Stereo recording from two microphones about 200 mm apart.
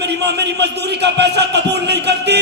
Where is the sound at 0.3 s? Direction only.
55° right (ahead or behind).